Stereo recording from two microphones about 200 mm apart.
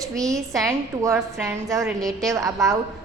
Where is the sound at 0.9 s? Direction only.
15° right (ahead or behind).